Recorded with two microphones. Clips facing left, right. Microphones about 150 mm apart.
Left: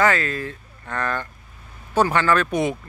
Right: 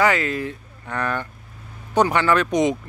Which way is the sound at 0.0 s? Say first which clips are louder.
Right 1 dB; 15° right (ahead or behind).